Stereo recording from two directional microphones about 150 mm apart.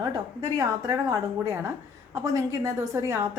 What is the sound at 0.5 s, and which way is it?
A woman's voice, 20° right (ahead or behind).